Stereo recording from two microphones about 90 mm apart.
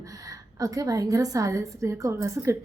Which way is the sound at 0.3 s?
40° right (ahead or behind).